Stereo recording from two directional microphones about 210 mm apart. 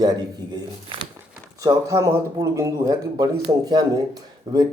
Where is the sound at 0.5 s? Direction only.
25° right (ahead or behind).